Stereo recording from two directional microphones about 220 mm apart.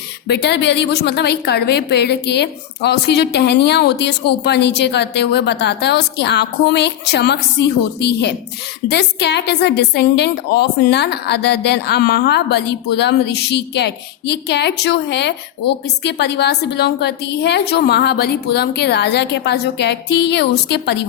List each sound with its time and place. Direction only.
0.3 s a woman's voice: 50° left (ahead or behind)